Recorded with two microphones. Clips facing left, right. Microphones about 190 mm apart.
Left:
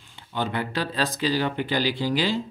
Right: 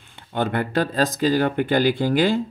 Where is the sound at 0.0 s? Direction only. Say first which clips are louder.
Right 5 dB; 55° right (ahead or behind).